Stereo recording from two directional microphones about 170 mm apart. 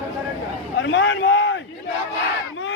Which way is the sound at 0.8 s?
90° left.